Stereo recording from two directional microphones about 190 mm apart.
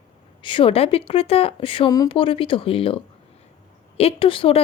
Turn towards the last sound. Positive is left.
turn(degrees=30)  # may be behind; listen again after turning